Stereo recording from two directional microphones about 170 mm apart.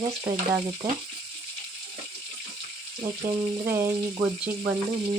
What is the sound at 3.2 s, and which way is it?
Frying, 15° right (ahead or behind).